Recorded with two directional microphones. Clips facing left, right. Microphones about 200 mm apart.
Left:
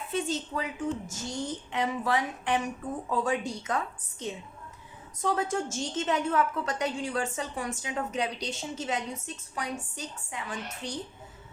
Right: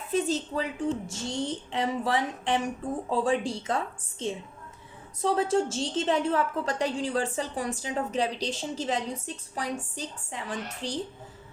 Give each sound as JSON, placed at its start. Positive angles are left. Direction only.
{"t": 0.1, "sound": "a woman's voice", "side_deg": -35}